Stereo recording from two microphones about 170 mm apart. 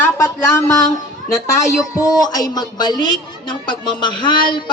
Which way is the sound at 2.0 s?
20° left (ahead or behind).